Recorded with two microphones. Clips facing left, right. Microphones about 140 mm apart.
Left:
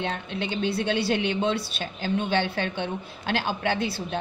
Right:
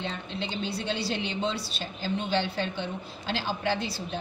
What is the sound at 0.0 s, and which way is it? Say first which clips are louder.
A woman's voice: left 4 dB; 60° left (ahead or behind).